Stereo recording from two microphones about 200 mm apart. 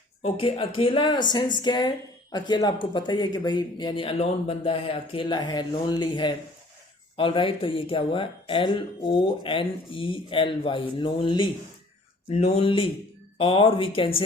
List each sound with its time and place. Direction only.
0.2 s speech: 30° left (ahead or behind)